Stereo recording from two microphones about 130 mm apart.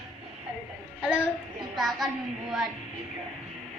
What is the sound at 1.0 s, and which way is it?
A woman's voice, 5° right (ahead or behind).